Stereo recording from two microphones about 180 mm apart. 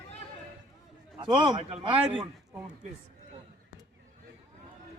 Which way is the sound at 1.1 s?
25° right (ahead or behind).